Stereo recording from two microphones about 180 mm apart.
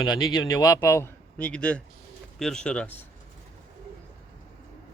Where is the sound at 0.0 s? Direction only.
20° left (ahead or behind).